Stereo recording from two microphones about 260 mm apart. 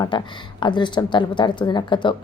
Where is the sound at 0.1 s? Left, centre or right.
Centre.